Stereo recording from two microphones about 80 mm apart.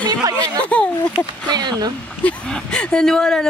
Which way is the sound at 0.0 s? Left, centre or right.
Right.